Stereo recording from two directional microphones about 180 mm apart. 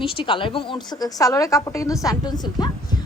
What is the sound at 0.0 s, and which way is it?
A woman's voice, 30° left (ahead or behind).